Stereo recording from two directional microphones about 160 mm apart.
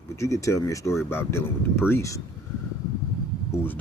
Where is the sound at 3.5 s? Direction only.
15° left (ahead or behind).